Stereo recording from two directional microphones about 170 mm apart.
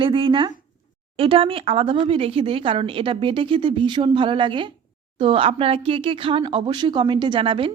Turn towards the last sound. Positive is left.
turn(degrees=-30)  # may be behind; listen again after turning